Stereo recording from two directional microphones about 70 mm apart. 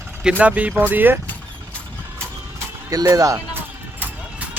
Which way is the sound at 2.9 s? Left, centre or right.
Right.